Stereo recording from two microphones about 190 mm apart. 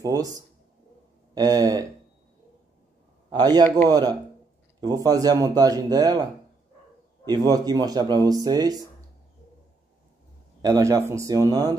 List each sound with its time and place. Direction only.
0.0 s speech: 20° right (ahead or behind)
3.3 s speech: 20° right (ahead or behind)
7.2 s speech: 20° right (ahead or behind)
10.6 s speech: 20° right (ahead or behind)